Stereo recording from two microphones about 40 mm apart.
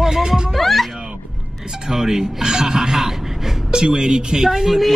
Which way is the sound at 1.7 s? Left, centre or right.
Centre.